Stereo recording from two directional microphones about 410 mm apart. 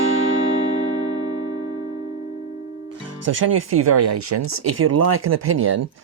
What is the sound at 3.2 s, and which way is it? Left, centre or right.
Speech, right.